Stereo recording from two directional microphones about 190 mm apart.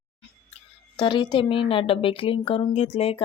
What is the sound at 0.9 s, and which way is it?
A woman's voice, 25° left (ahead or behind).